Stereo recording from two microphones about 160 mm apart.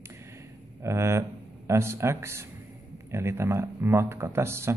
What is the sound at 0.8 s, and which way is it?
A man's voice, 15° right (ahead or behind).